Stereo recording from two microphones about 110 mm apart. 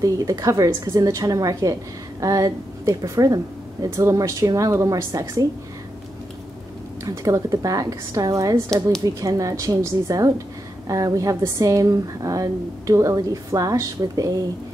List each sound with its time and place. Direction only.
0.0 s a woman's voice: 30° right (ahead or behind)
7.2 s a woman's voice: 30° right (ahead or behind)